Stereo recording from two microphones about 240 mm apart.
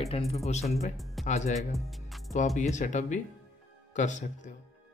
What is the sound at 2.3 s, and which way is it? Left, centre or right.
Speech, left.